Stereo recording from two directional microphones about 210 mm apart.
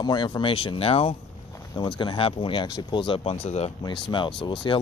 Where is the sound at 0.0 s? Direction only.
20° left (ahead or behind).